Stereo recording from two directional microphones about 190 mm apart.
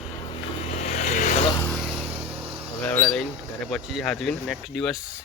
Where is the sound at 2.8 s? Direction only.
10° left (ahead or behind).